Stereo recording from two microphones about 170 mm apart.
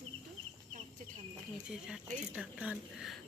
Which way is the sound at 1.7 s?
5° right (ahead or behind).